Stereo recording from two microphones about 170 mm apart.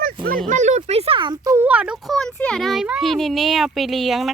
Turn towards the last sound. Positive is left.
turn(degrees=0)  # may be behind; listen again after turning